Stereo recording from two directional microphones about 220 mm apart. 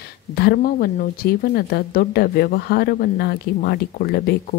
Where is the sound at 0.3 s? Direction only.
45° left (ahead or behind).